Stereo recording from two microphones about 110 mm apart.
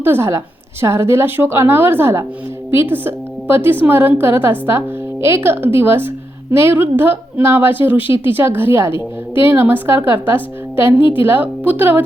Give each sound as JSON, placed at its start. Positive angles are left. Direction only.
{"t": 0.0, "sound": "a woman's voice", "side_deg": -20}